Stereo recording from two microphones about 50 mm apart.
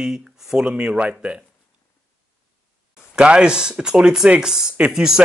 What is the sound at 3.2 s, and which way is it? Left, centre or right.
Speech, centre.